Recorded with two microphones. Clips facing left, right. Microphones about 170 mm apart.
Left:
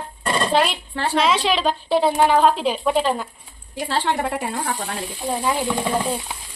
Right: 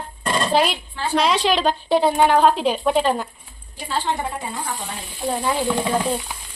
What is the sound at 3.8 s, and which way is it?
A woman's voice, 75° left (ahead or behind).